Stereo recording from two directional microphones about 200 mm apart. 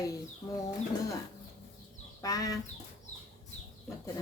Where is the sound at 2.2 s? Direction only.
15° left (ahead or behind).